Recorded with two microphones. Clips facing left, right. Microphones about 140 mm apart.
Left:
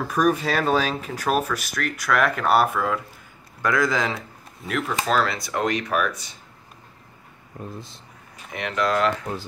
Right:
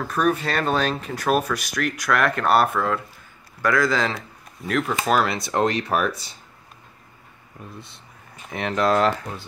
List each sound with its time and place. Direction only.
0.0 s speech: 10° left (ahead or behind)
3.6 s a man's voice: 20° left (ahead or behind)
4.6 s speech: 5° left (ahead or behind)
5.0 s speech: 15° right (ahead or behind); by 6.3 s 30° right (ahead or behind)
7.6 s speech: 35° left (ahead or behind)
8.5 s speech: 35° right (ahead or behind)